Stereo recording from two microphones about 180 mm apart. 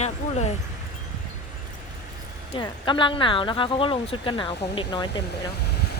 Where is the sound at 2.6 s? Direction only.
25° left (ahead or behind).